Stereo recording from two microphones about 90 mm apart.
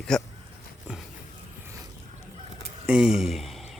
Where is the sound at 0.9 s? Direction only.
15° right (ahead or behind).